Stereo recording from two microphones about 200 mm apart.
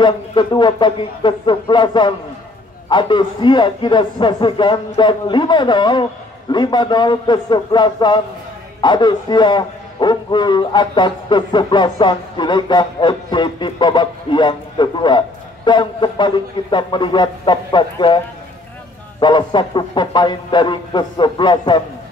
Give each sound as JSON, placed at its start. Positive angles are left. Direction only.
{"t": 0.0, "sound": "a man's voice", "side_deg": 25}